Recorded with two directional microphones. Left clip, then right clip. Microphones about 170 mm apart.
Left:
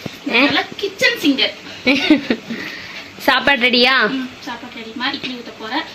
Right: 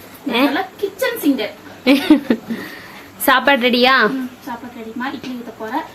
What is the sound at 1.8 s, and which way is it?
Speech, 20° right (ahead or behind).